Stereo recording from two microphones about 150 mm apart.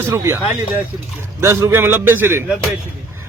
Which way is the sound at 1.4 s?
20° right (ahead or behind).